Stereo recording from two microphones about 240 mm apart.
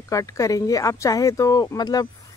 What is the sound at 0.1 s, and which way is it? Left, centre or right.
Speech, centre.